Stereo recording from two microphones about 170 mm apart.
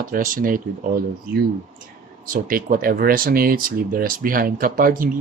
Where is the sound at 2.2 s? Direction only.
55° right (ahead or behind).